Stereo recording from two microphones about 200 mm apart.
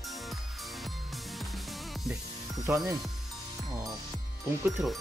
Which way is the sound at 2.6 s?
15° right (ahead or behind).